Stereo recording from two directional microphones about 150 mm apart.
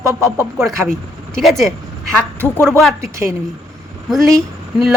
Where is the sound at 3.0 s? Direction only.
20° right (ahead or behind).